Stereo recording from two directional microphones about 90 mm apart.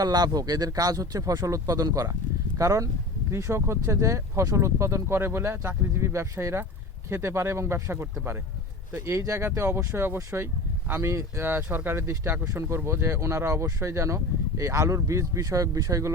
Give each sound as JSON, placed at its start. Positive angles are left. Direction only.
{"t": 0.0, "sound": "speech", "side_deg": -45}